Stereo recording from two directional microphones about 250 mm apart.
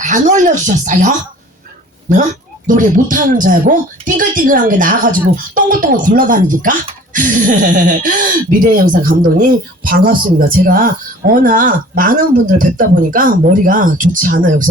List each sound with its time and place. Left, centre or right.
0.0 s speech: right
2.6 s speech: right